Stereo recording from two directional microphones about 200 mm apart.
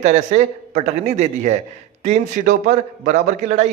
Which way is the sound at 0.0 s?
35° right (ahead or behind).